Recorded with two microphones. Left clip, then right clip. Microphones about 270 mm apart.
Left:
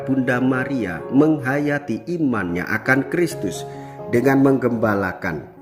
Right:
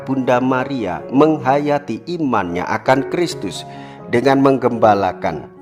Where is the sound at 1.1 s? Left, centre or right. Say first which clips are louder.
Right 4 dB; right.